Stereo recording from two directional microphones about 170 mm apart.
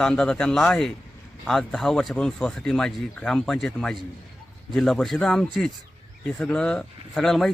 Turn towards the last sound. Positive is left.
turn(degrees=0)  # may be behind; listen again after turning